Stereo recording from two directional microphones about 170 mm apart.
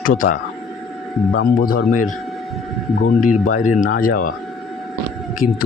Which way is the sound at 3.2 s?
50° left (ahead or behind).